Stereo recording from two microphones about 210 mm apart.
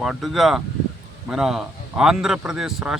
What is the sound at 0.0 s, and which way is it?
A man's voice, centre (ahead or behind).